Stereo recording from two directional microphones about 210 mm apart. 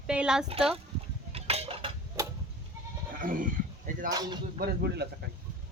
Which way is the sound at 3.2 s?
40° right (ahead or behind).